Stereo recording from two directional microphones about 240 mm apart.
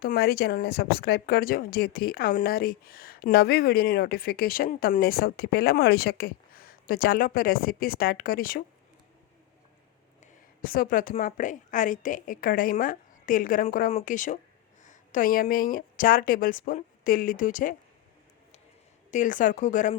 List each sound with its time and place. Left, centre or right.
0.0 s speech: left
10.6 s speech: left
19.1 s speech: left